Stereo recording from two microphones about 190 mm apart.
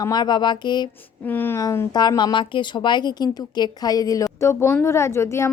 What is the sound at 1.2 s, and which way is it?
A woman's voice, 10° left (ahead or behind).